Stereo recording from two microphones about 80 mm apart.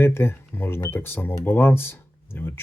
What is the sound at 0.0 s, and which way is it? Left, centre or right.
Speech, left.